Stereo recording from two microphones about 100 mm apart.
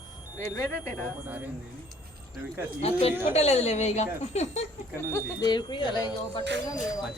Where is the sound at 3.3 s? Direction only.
90° left.